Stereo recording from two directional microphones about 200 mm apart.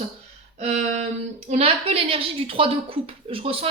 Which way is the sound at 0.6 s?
35° right (ahead or behind).